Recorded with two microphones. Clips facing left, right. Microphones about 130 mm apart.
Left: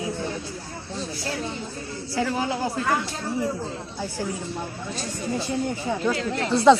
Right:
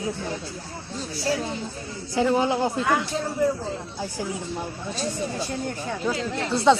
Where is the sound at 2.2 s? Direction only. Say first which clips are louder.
Right 4 dB; 25° right (ahead or behind).